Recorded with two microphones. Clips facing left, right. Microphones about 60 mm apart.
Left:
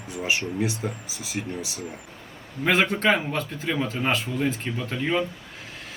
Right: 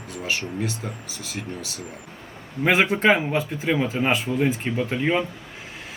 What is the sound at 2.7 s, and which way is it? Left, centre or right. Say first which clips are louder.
Speech: right 3 dB; centre.